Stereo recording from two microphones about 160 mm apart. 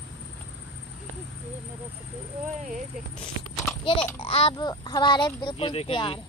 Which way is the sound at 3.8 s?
35° left (ahead or behind).